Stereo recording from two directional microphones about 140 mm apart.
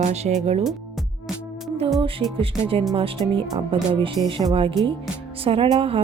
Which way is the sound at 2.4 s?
40° right (ahead or behind).